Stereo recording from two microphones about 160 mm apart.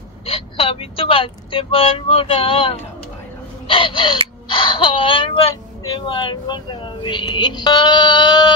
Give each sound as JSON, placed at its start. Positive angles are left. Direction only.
{"t": 0.3, "sound": "speech", "side_deg": 35}